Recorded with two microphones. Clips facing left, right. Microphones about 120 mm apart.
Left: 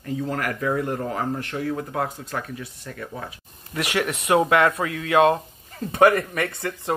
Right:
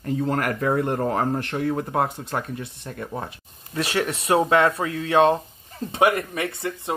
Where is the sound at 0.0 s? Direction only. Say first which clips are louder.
Right 3 dB; 40° right (ahead or behind).